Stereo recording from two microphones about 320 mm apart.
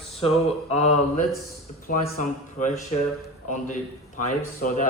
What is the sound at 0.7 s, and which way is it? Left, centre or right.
A man's voice, centre.